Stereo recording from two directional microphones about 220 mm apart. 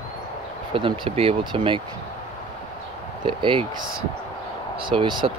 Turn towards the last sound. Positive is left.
turn(degrees=-20)  # may be behind; listen again after turning